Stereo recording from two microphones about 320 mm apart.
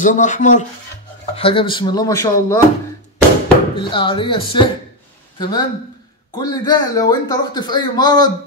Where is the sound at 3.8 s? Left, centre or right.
Centre.